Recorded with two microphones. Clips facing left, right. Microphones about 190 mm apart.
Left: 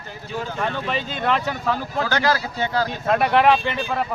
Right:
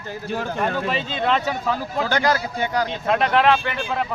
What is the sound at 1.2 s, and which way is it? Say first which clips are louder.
Speech: right 1 dB; centre (ahead or behind).